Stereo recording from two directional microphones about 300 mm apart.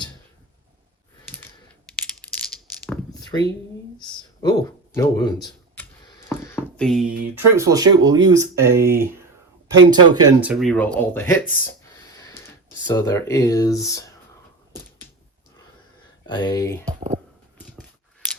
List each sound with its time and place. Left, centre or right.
2.2 s coin: centre
4.0 s speech: centre
12.1 s a sound: centre
12.9 s speech: centre
16.2 s speech: centre
16.8 s speech: right